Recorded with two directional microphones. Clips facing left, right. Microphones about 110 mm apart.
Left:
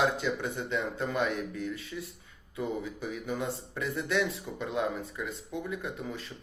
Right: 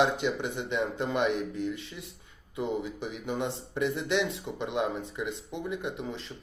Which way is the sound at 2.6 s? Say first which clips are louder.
Right 2 dB; 25° right (ahead or behind).